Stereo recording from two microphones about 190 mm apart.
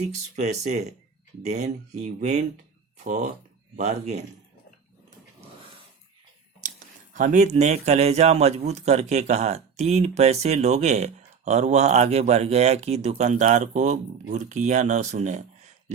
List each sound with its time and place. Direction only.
0.0 s speech: 35° right (ahead or behind)
7.1 s speech: 40° right (ahead or behind)